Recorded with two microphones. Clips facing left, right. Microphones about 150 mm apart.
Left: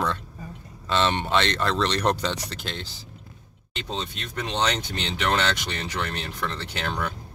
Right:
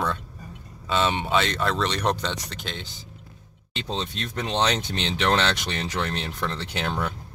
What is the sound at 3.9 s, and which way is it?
Speech, 30° right (ahead or behind).